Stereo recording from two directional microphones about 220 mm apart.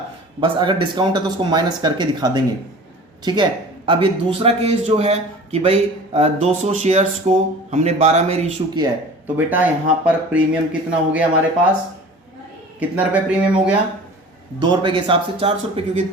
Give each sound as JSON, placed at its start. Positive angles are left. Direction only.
{"t": 0.3, "sound": "speech", "side_deg": -20}
{"t": 9.2, "sound": "speech", "side_deg": -10}
{"t": 12.8, "sound": "speech", "side_deg": -5}
{"t": 14.6, "sound": "speech", "side_deg": -20}